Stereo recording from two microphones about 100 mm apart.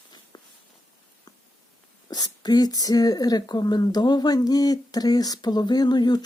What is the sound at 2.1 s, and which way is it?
Speech, 40° left (ahead or behind).